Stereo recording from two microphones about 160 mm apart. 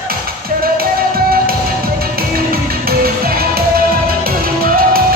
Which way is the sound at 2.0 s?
70° right (ahead or behind).